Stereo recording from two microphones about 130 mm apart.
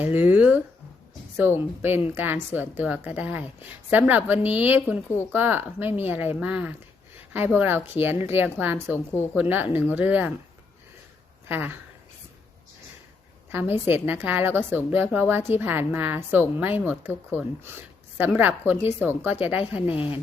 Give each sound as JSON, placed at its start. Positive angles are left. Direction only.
{"t": 0.0, "sound": "a woman's voice", "side_deg": -15}
{"t": 11.4, "sound": "a woman's voice", "side_deg": -15}
{"t": 13.8, "sound": "a woman's voice", "side_deg": -15}
{"t": 19.8, "sound": "a woman's voice", "side_deg": 45}